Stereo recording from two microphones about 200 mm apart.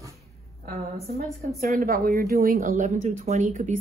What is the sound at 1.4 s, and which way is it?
A woman's voice, 45° right (ahead or behind).